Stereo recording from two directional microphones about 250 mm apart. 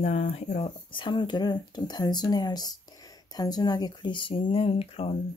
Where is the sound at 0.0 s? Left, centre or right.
Left.